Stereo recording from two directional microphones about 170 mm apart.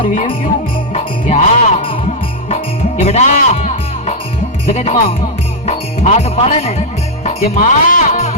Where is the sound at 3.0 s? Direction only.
40° left (ahead or behind).